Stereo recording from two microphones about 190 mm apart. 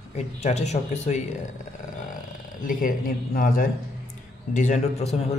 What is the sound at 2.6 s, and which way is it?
A man's voice, 45° left (ahead or behind).